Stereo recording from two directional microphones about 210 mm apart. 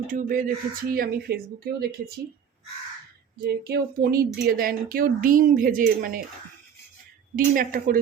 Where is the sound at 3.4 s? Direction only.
50° right (ahead or behind).